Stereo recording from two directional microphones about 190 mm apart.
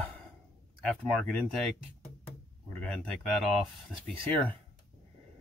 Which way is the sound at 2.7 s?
5° left (ahead or behind).